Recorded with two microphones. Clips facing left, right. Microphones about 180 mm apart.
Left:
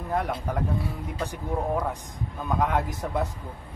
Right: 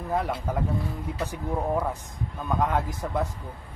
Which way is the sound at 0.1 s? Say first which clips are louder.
Even; centre (ahead or behind).